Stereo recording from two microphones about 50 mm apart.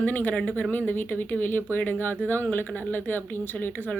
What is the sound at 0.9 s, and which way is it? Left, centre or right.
Speech, left.